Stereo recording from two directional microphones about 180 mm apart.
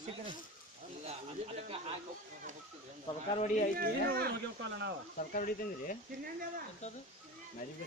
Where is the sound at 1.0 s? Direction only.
35° right (ahead or behind).